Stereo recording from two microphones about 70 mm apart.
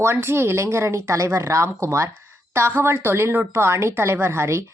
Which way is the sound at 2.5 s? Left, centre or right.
Right.